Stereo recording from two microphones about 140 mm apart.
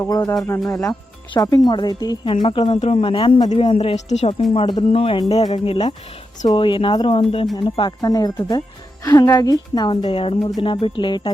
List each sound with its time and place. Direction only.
0.0 s speech: 20° left (ahead or behind); by 4.4 s 55° left (ahead or behind)
4.5 s speech: 35° left (ahead or behind)